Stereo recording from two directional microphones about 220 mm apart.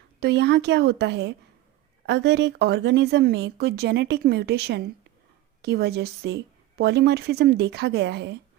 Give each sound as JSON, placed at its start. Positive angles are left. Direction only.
{"t": 0.2, "sound": "speech", "side_deg": -50}